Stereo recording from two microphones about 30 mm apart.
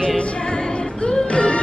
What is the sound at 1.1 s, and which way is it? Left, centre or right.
Music, left.